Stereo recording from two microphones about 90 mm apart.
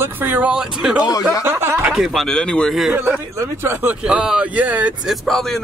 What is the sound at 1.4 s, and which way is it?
Speech, 30° right (ahead or behind).